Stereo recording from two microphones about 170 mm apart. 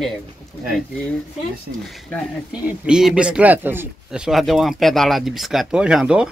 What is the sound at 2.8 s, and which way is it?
Speech, 5° right (ahead or behind).